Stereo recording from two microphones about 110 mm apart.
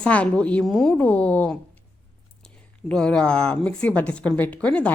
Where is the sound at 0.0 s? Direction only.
10° left (ahead or behind).